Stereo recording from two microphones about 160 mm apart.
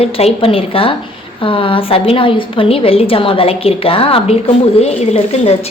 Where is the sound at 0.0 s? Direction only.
40° left (ahead or behind).